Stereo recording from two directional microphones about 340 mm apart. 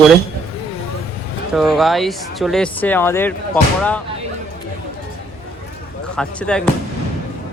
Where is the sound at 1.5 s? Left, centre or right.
Centre.